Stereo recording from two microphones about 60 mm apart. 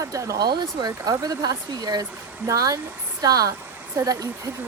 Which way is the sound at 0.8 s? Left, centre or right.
Right.